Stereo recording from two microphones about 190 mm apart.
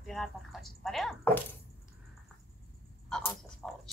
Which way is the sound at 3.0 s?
5° left (ahead or behind).